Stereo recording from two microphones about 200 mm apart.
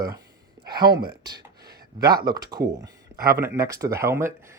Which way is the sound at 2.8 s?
15° right (ahead or behind).